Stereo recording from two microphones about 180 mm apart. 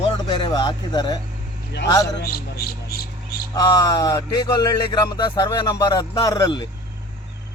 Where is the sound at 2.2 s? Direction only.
60° left (ahead or behind).